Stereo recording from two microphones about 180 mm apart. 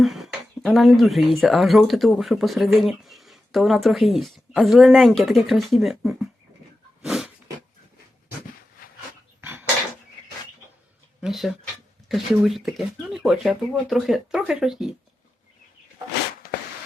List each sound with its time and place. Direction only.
0.0 s speech: centre (ahead or behind)
7.0 s snort: centre (ahead or behind)
9.4 s dishes: 10° right (ahead or behind)
11.2 s a sound: centre (ahead or behind)
12.0 s speech: centre (ahead or behind)
16.4 s a sound: 55° left (ahead or behind)